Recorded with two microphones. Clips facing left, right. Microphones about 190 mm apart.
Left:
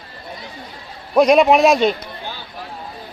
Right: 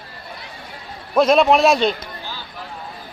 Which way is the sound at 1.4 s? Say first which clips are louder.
Left 2 dB; centre (ahead or behind).